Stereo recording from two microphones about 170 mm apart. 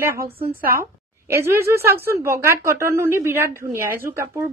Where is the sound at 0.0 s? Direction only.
15° right (ahead or behind).